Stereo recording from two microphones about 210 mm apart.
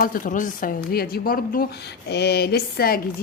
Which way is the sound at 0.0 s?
40° left (ahead or behind).